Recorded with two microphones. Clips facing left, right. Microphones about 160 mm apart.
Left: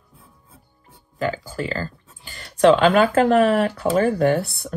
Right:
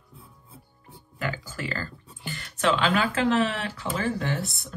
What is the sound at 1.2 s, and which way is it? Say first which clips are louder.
Speech: left 7 dB; 35° left (ahead or behind).